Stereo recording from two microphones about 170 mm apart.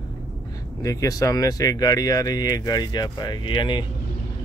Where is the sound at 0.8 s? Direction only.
20° left (ahead or behind).